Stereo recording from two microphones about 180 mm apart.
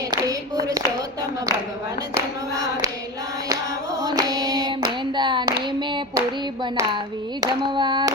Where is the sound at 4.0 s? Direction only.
20° right (ahead or behind).